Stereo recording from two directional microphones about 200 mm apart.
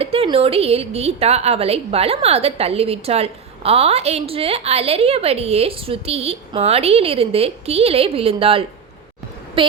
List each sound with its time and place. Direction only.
0.0 s a woman's voice: 30° right (ahead or behind)